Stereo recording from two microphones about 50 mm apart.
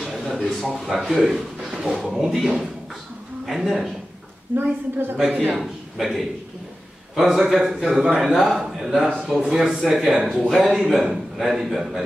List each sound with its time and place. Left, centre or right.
0.0 s a sound: centre
0.5 s a man's voice: centre
1.7 s a sound: centre
2.0 s a man's voice: centre
4.5 s a woman's voice: right
5.5 s a man's voice: centre